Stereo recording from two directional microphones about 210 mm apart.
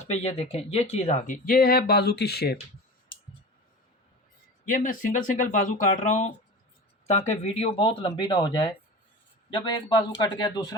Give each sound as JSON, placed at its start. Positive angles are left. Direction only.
{"t": 0.0, "sound": "speech", "side_deg": 30}
{"t": 4.6, "sound": "speech", "side_deg": 40}